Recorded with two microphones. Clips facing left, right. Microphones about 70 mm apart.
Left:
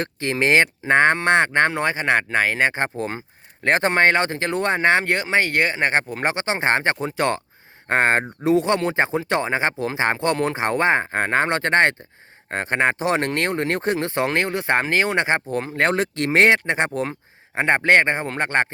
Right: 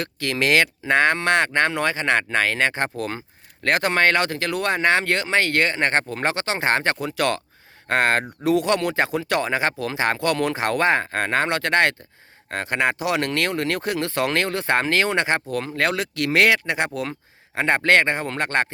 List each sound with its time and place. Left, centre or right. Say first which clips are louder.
0.0 s speech: left 2 dB; left